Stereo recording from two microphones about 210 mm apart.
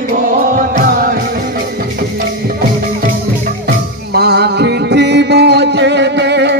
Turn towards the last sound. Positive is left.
turn(degrees=-55)  # may be behind; listen again after turning